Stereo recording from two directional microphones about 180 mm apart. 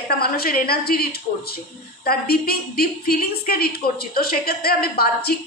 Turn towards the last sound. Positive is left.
turn(degrees=60)  # may be behind; listen again after turning